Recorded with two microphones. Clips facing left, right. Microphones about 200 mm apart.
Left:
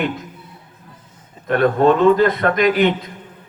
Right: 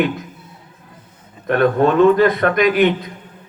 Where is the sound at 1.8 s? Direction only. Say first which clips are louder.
Right 1 dB; 60° right (ahead or behind).